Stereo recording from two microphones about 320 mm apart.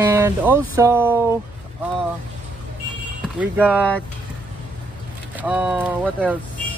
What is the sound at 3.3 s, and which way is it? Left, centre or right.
Speech, centre.